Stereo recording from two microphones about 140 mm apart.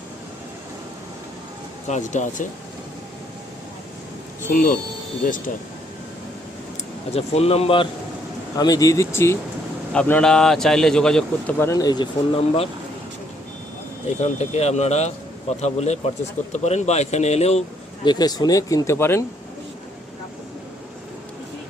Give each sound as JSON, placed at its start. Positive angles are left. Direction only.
{"t": 1.9, "sound": "speech", "side_deg": 60}
{"t": 4.5, "sound": "speech", "side_deg": 85}
{"t": 5.2, "sound": "speech", "side_deg": 75}
{"t": 7.1, "sound": "speech", "side_deg": 45}
{"t": 8.5, "sound": "speech", "side_deg": 25}
{"t": 9.9, "sound": "speech", "side_deg": 5}
{"t": 14.2, "sound": "speech", "side_deg": 55}
{"t": 18.0, "sound": "speech", "side_deg": 30}